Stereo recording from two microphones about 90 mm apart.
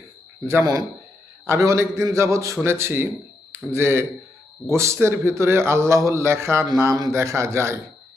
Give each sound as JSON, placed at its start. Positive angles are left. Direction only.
{"t": 0.6, "sound": "a man's voice", "side_deg": -45}
{"t": 1.5, "sound": "a man's voice", "side_deg": -30}
{"t": 6.9, "sound": "a man's voice", "side_deg": -45}
{"t": 7.2, "sound": "a man's voice", "side_deg": -30}